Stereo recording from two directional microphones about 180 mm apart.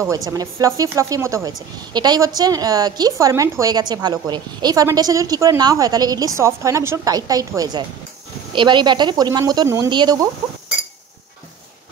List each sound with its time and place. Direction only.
0.0 s a woman's voice: 20° right (ahead or behind)